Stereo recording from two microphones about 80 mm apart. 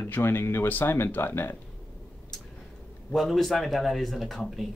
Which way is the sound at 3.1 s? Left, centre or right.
Centre.